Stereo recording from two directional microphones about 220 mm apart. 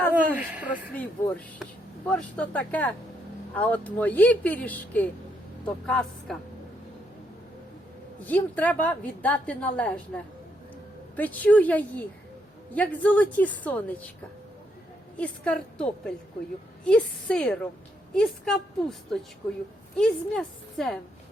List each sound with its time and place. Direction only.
0.1 s speech: 5° right (ahead or behind)
0.9 s a woman's voice: 5° left (ahead or behind)
8.3 s a woman's voice: 5° left (ahead or behind)
11.2 s a woman's voice: 5° left (ahead or behind)
15.2 s a woman's voice: 5° left (ahead or behind)
19.4 s a woman's voice: 25° left (ahead or behind)
20.0 s a woman's voice: centre (ahead or behind)